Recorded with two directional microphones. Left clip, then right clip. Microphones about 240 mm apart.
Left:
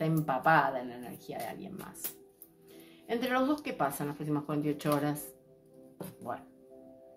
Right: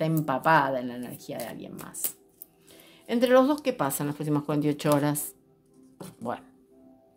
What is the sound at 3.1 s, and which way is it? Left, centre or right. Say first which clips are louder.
Speech: right 9 dB; right.